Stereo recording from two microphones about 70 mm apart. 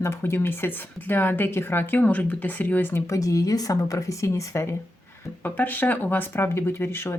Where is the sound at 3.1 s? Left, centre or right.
Left.